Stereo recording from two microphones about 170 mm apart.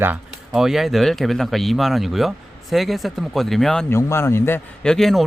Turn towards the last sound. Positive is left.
turn(degrees=0)  # may be behind; listen again after turning